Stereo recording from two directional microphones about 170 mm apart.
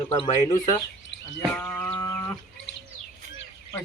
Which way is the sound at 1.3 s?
10° left (ahead or behind).